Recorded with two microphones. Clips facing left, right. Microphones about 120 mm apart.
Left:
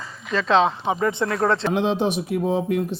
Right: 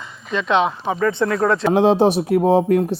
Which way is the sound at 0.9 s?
20° left (ahead or behind).